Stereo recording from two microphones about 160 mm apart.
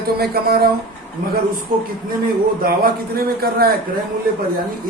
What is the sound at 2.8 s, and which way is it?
Speech, 70° right (ahead or behind).